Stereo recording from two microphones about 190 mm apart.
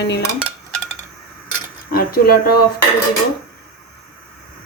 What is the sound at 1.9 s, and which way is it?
Speech, 55° left (ahead or behind).